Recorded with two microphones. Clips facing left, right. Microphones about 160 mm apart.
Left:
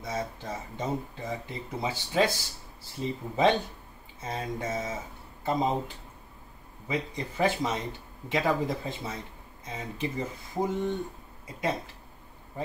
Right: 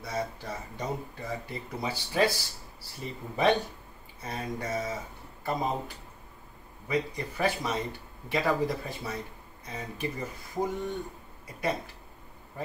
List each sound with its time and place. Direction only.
0.0 s speech: 20° left (ahead or behind)
6.9 s speech: 20° left (ahead or behind)